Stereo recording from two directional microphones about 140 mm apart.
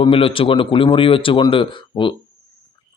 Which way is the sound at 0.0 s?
40° left (ahead or behind).